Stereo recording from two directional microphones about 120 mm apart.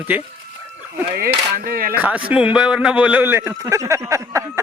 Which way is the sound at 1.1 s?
45° right (ahead or behind).